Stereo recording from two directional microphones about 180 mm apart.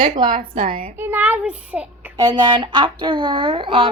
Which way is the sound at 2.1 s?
25° right (ahead or behind).